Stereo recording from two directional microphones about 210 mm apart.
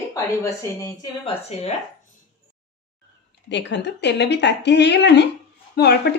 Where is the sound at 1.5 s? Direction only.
30° left (ahead or behind).